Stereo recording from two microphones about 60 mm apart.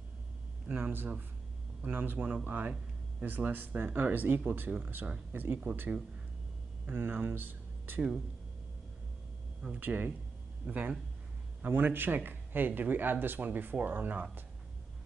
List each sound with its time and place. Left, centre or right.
0.7 s speech: right
6.9 s speech: right
9.8 s speech: right